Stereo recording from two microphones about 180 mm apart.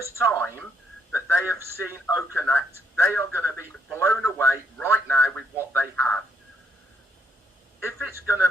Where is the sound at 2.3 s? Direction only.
10° left (ahead or behind).